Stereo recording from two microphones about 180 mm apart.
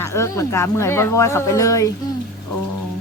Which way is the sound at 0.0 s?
15° left (ahead or behind).